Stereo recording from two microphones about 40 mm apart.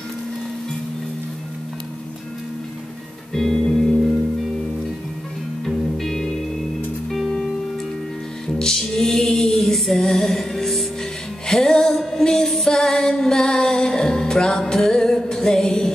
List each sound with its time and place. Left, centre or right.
3.3 s music: centre
5.7 s music: centre
8.5 s music: centre